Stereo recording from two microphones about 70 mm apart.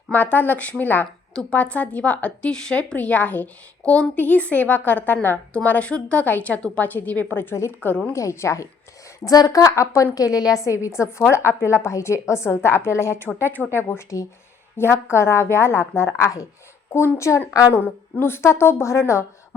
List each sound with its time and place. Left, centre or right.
0.1 s a woman's voice: left
1.3 s a woman's voice: centre
1.5 s a woman's voice: centre
7.5 s a woman's voice: left
7.8 s a woman's voice: left
8.1 s a woman's voice: left
9.2 s a woman's voice: left
13.2 s a woman's voice: left
17.7 s a woman's voice: left